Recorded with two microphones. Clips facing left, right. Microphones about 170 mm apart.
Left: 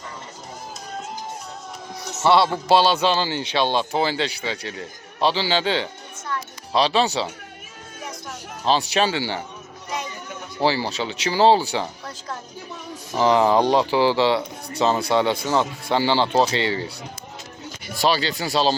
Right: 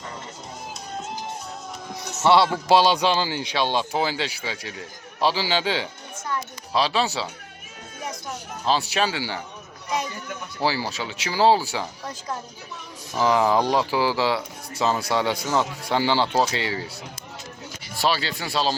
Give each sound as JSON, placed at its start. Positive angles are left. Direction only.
{"t": 2.2, "sound": "a man's voice", "side_deg": 15}
{"t": 2.5, "sound": "speech", "side_deg": -15}
{"t": 8.7, "sound": "speech", "side_deg": -5}
{"t": 10.8, "sound": "speech", "side_deg": 25}
{"t": 11.1, "sound": "speech", "side_deg": -5}
{"t": 13.1, "sound": "speech", "side_deg": 25}
{"t": 13.9, "sound": "speech", "side_deg": -5}
{"t": 14.8, "sound": "speech", "side_deg": 25}
{"t": 16.5, "sound": "speech", "side_deg": -5}
{"t": 18.0, "sound": "speech", "side_deg": 0}